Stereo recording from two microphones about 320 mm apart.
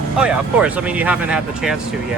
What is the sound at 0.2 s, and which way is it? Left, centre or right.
Speech, centre.